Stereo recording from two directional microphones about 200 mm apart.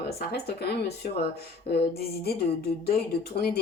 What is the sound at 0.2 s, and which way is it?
Speech, 50° left (ahead or behind).